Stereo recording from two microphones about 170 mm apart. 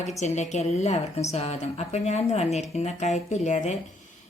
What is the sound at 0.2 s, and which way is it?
Speech, 40° left (ahead or behind).